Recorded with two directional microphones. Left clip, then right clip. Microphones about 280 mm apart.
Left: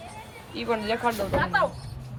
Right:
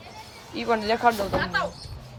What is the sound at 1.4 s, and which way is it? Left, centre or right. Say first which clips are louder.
Speech: left 6 dB; centre.